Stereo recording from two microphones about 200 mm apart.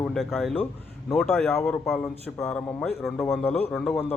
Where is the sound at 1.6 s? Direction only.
15° left (ahead or behind).